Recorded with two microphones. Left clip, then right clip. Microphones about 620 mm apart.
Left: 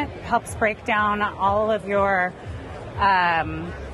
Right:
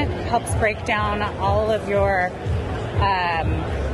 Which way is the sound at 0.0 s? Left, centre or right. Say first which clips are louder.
Right 1 dB; left.